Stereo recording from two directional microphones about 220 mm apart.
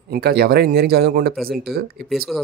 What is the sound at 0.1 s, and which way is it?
Speech, 45° right (ahead or behind).